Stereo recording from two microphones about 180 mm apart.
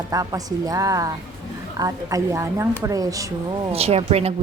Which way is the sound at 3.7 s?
35° right (ahead or behind).